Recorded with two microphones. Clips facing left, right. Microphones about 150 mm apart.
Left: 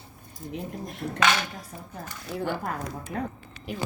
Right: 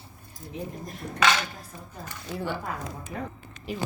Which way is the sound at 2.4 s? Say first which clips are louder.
Left 3 dB; 50° left (ahead or behind).